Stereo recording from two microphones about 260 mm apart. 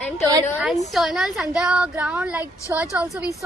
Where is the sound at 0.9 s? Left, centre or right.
Centre.